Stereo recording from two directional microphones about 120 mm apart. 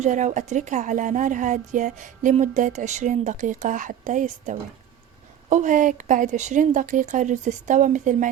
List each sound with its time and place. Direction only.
0.0 s speech: 85° right